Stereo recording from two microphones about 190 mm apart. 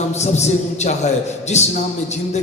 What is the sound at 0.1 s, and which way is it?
A man's voice, 35° left (ahead or behind).